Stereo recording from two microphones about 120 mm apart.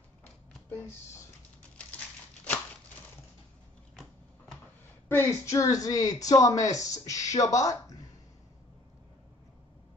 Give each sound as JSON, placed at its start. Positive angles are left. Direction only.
{"t": 0.7, "sound": "speech", "side_deg": 15}
{"t": 3.9, "sound": "a sound", "side_deg": 0}
{"t": 5.0, "sound": "speech", "side_deg": 25}